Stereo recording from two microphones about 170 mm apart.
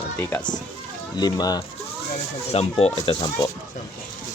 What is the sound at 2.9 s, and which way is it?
Speech, 25° left (ahead or behind).